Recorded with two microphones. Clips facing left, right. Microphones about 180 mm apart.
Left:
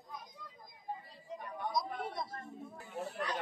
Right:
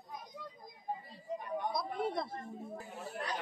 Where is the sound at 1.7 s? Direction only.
60° right (ahead or behind).